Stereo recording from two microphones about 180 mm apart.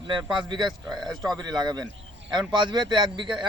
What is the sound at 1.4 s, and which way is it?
A man's voice, 25° right (ahead or behind).